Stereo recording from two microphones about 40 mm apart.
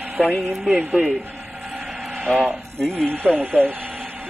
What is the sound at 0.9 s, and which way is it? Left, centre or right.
Speech, right.